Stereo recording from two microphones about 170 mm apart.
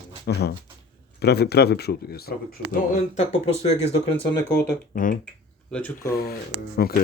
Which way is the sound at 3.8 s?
35° left (ahead or behind).